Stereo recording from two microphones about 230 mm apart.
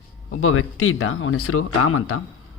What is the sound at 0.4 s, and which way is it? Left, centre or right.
Speech, left.